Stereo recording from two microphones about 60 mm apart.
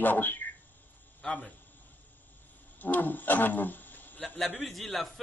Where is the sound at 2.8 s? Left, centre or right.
Left.